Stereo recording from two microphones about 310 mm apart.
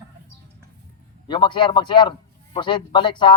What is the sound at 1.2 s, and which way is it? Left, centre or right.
A man's voice, centre.